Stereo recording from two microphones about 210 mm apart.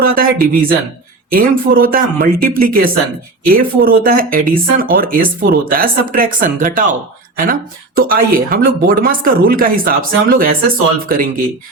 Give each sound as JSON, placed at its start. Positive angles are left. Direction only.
{"t": 0.0, "sound": "speech", "side_deg": -45}
{"t": 7.9, "sound": "speech", "side_deg": -40}